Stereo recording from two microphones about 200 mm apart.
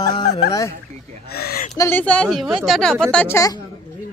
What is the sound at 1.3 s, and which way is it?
Speech, 50° left (ahead or behind).